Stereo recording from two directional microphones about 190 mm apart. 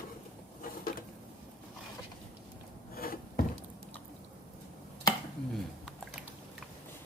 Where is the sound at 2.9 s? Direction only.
50° left (ahead or behind).